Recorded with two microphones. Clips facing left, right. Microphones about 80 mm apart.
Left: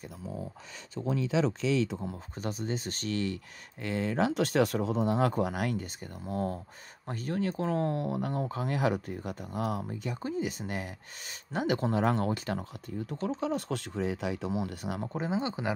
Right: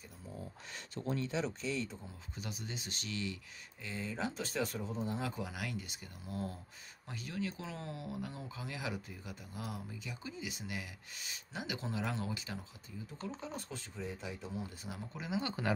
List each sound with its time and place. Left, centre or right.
1.3 s speech: left
2.3 s speech: left
3.8 s speech: left
15.1 s speech: left
15.4 s speech: centre